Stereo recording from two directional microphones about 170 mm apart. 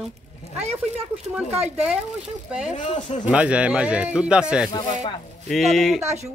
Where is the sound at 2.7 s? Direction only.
45° left (ahead or behind).